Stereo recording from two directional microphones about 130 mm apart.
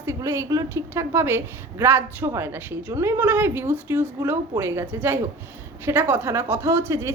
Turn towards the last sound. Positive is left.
turn(degrees=-20)  # may be behind; listen again after turning